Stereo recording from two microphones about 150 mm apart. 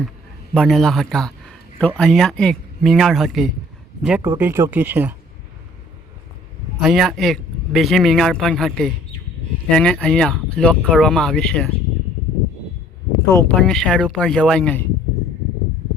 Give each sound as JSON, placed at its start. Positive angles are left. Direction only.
{"t": 0.5, "sound": "a man's voice", "side_deg": 5}
{"t": 4.0, "sound": "speech", "side_deg": -10}
{"t": 6.7, "sound": "speech", "side_deg": 0}
{"t": 13.3, "sound": "speech", "side_deg": 10}